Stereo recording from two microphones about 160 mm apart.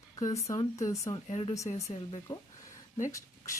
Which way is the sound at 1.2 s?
35° left (ahead or behind).